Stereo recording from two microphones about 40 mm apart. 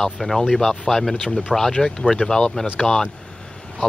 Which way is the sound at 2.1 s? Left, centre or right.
Centre.